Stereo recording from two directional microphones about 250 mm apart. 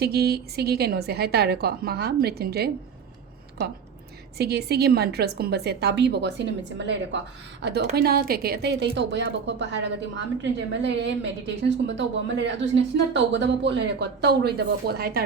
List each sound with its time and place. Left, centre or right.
0.0 s a woman's voice: right
4.4 s a woman's voice: right